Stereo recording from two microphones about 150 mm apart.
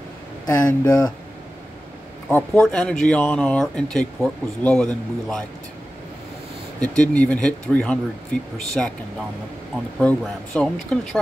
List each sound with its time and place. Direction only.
0.5 s speech: 25° left (ahead or behind)
2.3 s speech: 5° left (ahead or behind)
6.8 s speech: 10° left (ahead or behind)
9.9 s speech: 5° left (ahead or behind)